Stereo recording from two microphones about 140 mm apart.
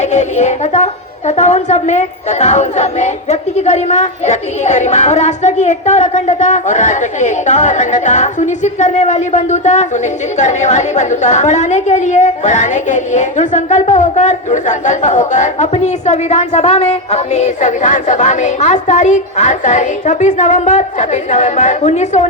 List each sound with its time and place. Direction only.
0.0 s a woman's voice: 55° left (ahead or behind)